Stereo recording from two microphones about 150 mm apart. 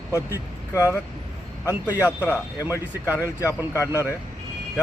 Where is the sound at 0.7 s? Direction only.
20° left (ahead or behind).